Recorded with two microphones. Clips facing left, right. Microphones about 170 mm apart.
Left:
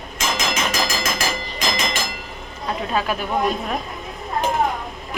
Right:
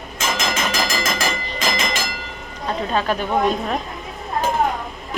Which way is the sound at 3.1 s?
5° left (ahead or behind).